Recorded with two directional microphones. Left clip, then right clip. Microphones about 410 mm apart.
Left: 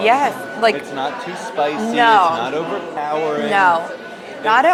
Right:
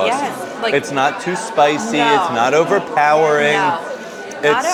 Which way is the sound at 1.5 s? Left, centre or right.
Right.